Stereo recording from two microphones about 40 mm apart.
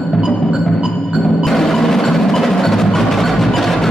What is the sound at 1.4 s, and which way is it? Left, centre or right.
Wood block, centre.